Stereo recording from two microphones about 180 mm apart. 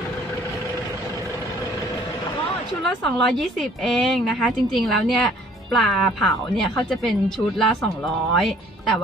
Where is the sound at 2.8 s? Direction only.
Centre (ahead or behind).